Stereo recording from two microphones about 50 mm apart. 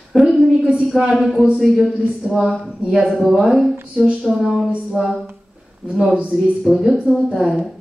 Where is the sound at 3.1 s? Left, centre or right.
Centre.